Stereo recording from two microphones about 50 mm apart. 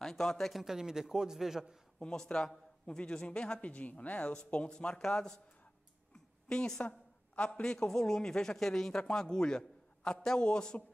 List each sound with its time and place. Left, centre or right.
0.0 s a man's voice: centre
2.0 s a woman's voice: centre